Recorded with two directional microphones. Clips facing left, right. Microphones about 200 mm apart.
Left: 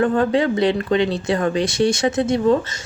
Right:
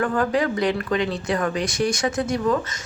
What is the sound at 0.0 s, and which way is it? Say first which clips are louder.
Speech: left 4 dB; 25° left (ahead or behind).